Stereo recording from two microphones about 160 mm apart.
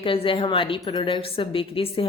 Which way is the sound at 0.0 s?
35° left (ahead or behind).